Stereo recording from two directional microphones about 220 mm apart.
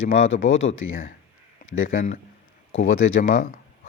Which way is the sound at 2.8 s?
65° left (ahead or behind).